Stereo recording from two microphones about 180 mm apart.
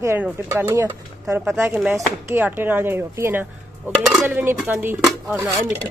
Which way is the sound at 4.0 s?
Centre (ahead or behind).